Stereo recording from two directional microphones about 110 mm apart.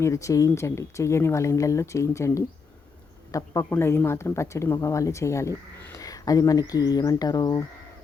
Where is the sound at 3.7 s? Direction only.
20° left (ahead or behind); by 7.6 s 35° left (ahead or behind).